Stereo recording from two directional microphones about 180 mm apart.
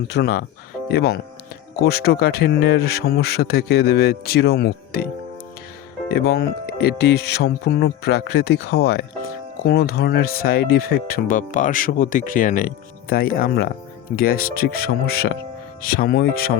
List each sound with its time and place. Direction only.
0.1 s speech: 60° left (ahead or behind)
6.2 s speech: 60° left (ahead or behind)